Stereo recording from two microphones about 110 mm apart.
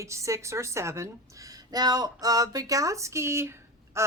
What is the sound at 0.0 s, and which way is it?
A woman's voice, 25° right (ahead or behind).